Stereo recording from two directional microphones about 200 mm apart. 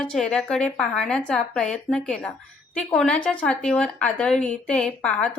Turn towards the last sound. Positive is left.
turn(degrees=5)  # may be behind; listen again after turning